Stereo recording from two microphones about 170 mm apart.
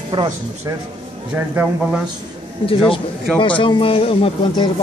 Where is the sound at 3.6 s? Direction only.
30° left (ahead or behind).